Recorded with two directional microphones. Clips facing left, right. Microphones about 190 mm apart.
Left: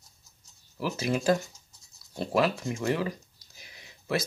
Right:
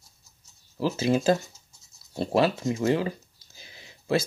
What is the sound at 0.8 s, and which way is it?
Speech, 25° right (ahead or behind).